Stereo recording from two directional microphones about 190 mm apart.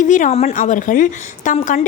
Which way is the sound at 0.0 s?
40° left (ahead or behind).